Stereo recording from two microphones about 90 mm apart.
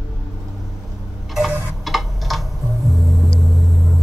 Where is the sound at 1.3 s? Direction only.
Centre (ahead or behind).